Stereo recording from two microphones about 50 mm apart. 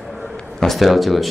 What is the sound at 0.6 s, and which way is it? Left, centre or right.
Speech, centre.